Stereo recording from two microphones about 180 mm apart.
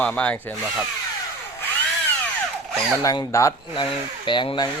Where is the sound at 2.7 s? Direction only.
Centre (ahead or behind).